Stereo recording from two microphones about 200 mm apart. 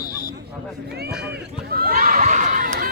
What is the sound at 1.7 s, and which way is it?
Crowd, 50° right (ahead or behind).